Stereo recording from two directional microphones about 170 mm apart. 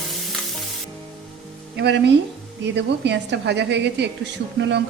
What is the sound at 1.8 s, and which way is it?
A woman's voice, 90° right.